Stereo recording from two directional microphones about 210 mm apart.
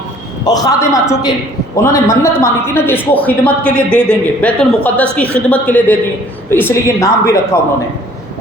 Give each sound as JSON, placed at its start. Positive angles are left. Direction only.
{"t": 0.4, "sound": "a woman's voice", "side_deg": 20}